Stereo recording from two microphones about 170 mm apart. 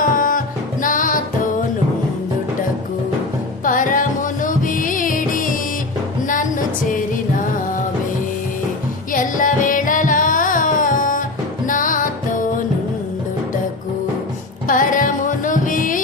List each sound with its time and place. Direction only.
0.0 s music: 55° left (ahead or behind)
3.6 s music: 50° left (ahead or behind)
9.1 s music: 50° left (ahead or behind)
14.7 s music: 50° left (ahead or behind)